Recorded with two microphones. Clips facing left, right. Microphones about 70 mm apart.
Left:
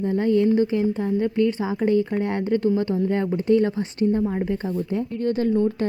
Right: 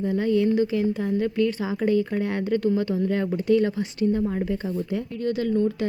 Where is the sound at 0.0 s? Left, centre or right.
Left.